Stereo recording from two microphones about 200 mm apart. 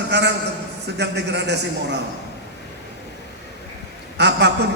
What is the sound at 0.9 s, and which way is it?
A man's voice, 60° right (ahead or behind).